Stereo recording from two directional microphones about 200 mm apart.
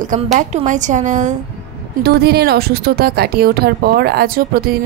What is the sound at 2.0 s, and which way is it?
Speech, 50° right (ahead or behind).